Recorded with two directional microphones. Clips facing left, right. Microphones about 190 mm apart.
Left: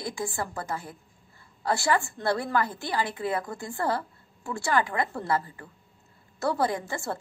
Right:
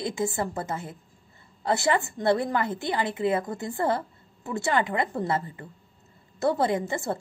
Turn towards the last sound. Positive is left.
turn(degrees=-20)  # may be behind; listen again after turning